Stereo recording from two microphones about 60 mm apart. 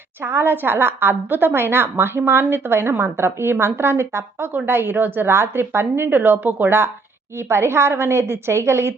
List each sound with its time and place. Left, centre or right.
0.2 s a woman's voice: right